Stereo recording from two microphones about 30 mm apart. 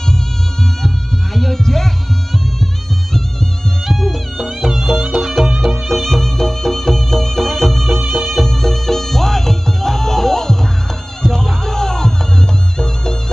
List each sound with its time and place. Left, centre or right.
0.8 s music: centre
4.6 s music: centre
5.7 s music: centre; by 13.2 s left